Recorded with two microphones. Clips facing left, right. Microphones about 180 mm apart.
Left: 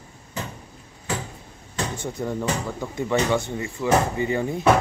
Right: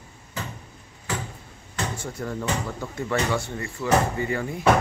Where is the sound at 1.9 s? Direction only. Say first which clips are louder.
Left 3 dB; 20° left (ahead or behind).